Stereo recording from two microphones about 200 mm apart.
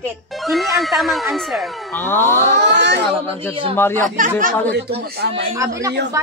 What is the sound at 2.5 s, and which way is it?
Speech, 60° right (ahead or behind).